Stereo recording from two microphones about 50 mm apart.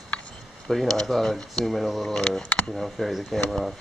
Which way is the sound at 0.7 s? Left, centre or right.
Centre.